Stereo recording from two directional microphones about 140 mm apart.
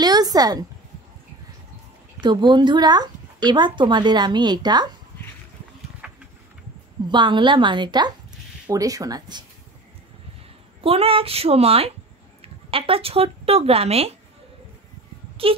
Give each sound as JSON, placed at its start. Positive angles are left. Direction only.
{"t": 0.0, "sound": "a sound", "side_deg": -30}
{"t": 2.1, "sound": "speech", "side_deg": -30}
{"t": 6.0, "sound": "insect", "side_deg": -10}
{"t": 7.1, "sound": "speech", "side_deg": -35}
{"t": 10.8, "sound": "a woman's voice", "side_deg": -40}
{"t": 15.4, "sound": "speech", "side_deg": -40}